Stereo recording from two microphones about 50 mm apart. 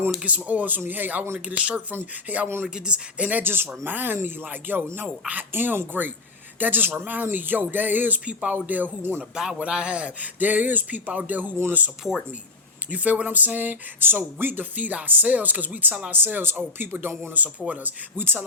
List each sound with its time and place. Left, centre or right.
0.3 s speech: right
1.5 s speech: right
1.9 s speech: right
2.6 s speech: centre
3.4 s speech: right
8.3 s speech: right
9.3 s speech: centre
10.4 s speech: right
12.9 s speech: right
17.4 s speech: right
18.2 s speech: right